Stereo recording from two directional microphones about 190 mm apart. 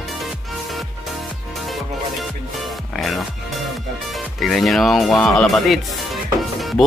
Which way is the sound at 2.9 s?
Centre (ahead or behind).